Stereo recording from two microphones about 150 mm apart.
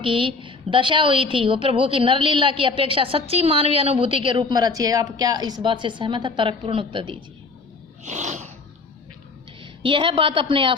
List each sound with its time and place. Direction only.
0.0 s a woman's voice: 35° right (ahead or behind)
8.0 s a sound: 50° right (ahead or behind)
9.8 s a woman's voice: 35° right (ahead or behind)